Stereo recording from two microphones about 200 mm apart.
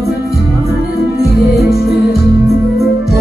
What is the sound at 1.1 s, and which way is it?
Music, 50° left (ahead or behind).